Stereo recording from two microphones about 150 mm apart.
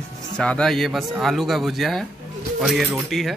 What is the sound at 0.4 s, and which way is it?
Speech, 5° left (ahead or behind).